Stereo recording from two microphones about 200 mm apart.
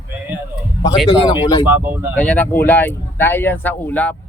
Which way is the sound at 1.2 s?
20° left (ahead or behind).